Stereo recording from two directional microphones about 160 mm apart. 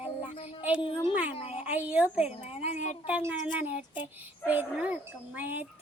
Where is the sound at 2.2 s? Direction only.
40° left (ahead or behind).